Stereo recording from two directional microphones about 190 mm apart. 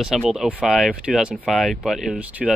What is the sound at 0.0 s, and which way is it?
Speech, centre (ahead or behind).